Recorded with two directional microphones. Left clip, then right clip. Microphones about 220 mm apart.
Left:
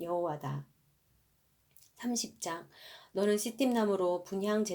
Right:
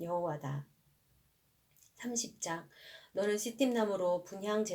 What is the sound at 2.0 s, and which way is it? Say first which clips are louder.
Speech: left 2 dB; 40° left (ahead or behind).